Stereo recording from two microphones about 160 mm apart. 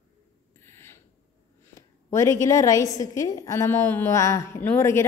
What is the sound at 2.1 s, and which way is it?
A woman's voice, 20° left (ahead or behind).